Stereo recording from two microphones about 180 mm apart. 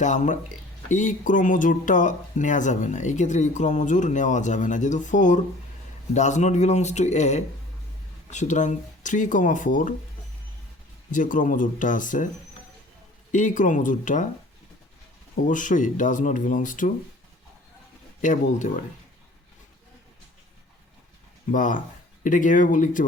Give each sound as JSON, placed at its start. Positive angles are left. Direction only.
{"t": 0.0, "sound": "speech", "side_deg": 45}
{"t": 11.1, "sound": "speech", "side_deg": 45}
{"t": 13.3, "sound": "speech", "side_deg": 45}
{"t": 15.4, "sound": "speech", "side_deg": 45}
{"t": 18.2, "sound": "speech", "side_deg": 45}
{"t": 21.5, "sound": "speech", "side_deg": 45}